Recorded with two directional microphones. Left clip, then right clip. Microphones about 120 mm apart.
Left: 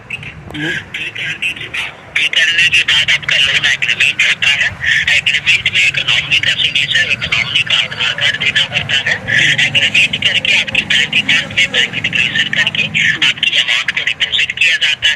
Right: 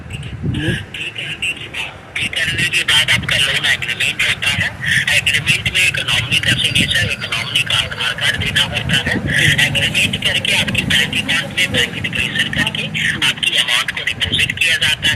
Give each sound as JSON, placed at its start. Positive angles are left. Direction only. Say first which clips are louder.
{"t": 2.1, "sound": "a man's voice", "louder": "left 7 dB", "side_deg": -35}
{"t": 4.9, "sound": "speech", "louder": "left 2 dB", "side_deg": -60}